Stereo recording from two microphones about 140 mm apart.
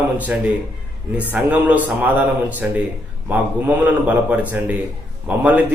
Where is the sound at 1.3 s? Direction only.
10° right (ahead or behind).